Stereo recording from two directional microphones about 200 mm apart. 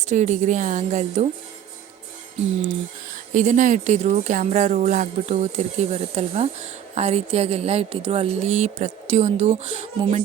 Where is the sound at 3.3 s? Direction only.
40° right (ahead or behind).